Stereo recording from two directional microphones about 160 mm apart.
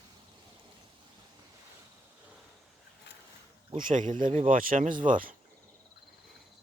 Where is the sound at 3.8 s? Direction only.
55° right (ahead or behind).